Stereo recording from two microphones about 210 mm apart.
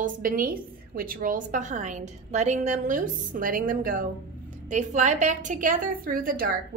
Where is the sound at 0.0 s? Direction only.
40° right (ahead or behind).